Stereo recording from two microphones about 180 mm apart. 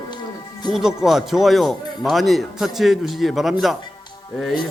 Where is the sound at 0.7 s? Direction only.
Centre (ahead or behind).